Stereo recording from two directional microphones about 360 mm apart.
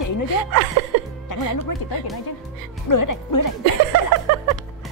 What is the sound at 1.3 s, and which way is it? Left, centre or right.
Speech, left.